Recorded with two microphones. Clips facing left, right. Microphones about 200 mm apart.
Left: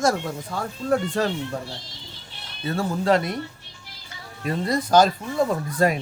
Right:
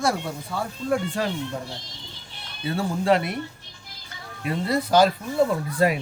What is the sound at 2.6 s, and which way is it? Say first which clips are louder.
Speech: even; 40° left (ahead or behind).